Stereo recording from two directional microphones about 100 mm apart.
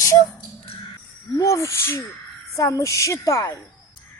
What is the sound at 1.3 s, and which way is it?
A woman's voice, 30° left (ahead or behind).